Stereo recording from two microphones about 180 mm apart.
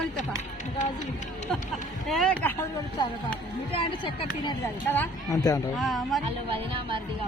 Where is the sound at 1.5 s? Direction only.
5° left (ahead or behind).